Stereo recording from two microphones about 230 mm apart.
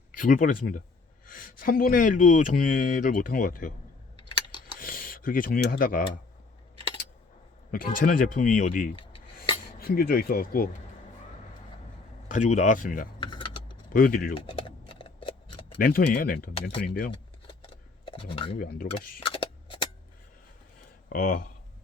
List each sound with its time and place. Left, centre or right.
0.2 s speech: left
4.8 s speech: left
7.7 s speech: left
12.3 s speech: left
13.1 s typing: centre
13.9 s speech: left
14.3 s tick-tock: left
15.8 s speech: left
18.0 s a sound: left
21.1 s speech: left